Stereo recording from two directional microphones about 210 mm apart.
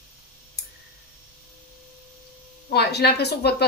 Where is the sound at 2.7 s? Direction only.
50° left (ahead or behind).